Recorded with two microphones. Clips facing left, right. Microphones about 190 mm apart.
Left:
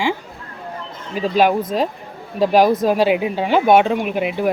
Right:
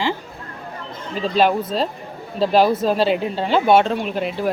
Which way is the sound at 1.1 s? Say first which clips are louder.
Left 2 dB; 10° left (ahead or behind).